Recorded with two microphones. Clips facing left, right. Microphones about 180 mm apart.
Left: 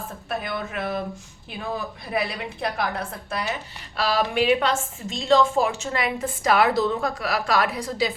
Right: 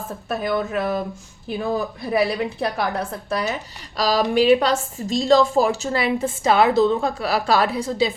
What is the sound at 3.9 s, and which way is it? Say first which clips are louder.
A woman's voice: right 4 dB; 35° right (ahead or behind).